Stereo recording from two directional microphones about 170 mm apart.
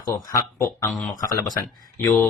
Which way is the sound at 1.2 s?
25° left (ahead or behind).